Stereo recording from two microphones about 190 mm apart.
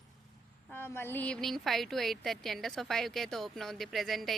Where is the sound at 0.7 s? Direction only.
10° left (ahead or behind).